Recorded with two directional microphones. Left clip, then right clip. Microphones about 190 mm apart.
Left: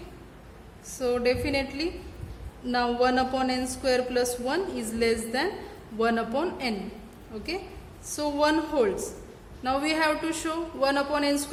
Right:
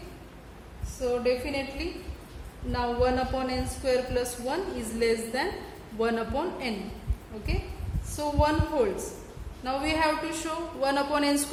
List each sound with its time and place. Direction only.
1.0 s a woman's voice: 35° left (ahead or behind)
8.1 s a woman's voice: 30° left (ahead or behind)
10.8 s a woman's voice: 15° left (ahead or behind)